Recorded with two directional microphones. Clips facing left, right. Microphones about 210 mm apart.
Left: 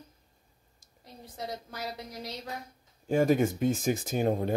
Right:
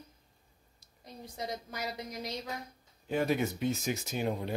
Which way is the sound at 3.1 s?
45° left (ahead or behind).